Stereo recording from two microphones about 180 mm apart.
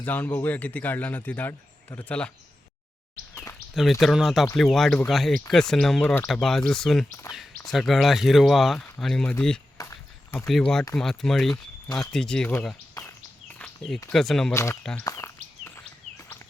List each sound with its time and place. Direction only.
0.0 s speech: 10° left (ahead or behind)
4.0 s speech: centre (ahead or behind)
7.3 s speech: 15° left (ahead or behind)
7.7 s speech: centre (ahead or behind)
9.8 s speech: 20° left (ahead or behind)
10.3 s speech: 5° left (ahead or behind)
11.5 s speech: 15° left (ahead or behind)
12.1 s speech: 5° left (ahead or behind)
13.6 s a sound: 10° left (ahead or behind)
14.1 s speech: centre (ahead or behind)
14.5 s speech: 15° left (ahead or behind)